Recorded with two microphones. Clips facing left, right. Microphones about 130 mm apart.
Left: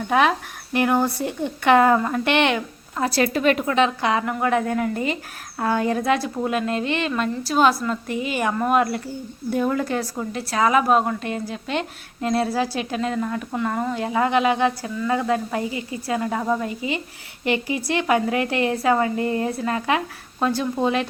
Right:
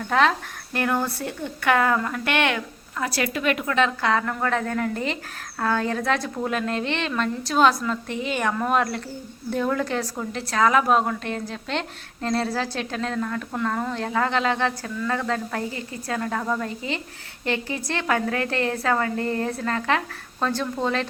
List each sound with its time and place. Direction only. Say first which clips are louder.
0.1 s speech: left 1 dB; 15° left (ahead or behind); by 3.8 s 35° left (ahead or behind)
3.8 s a woman's voice: left 2 dB; 20° left (ahead or behind)